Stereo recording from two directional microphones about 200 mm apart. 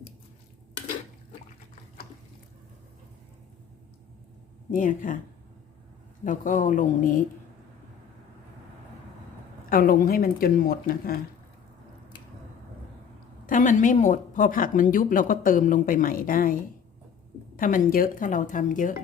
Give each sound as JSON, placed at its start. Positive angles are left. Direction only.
{"t": 4.7, "sound": "a woman's voice", "side_deg": 40}
{"t": 6.2, "sound": "a woman's voice", "side_deg": 40}
{"t": 9.6, "sound": "speech", "side_deg": 45}
{"t": 13.5, "sound": "speech", "side_deg": 40}
{"t": 17.6, "sound": "a woman's voice", "side_deg": 45}